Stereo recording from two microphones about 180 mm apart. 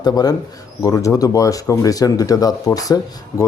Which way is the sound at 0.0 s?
20° left (ahead or behind).